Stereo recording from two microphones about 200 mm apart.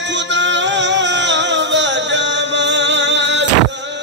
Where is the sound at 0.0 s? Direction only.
60° right (ahead or behind).